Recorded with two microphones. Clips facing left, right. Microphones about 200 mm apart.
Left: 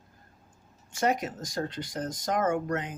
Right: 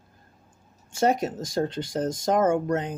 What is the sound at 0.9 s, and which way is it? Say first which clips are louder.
Speech: right 5 dB; 30° right (ahead or behind).